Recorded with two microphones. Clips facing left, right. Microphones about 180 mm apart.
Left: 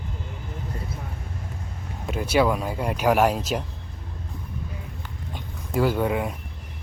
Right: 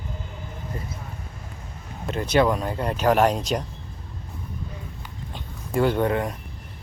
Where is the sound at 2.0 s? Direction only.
5° left (ahead or behind).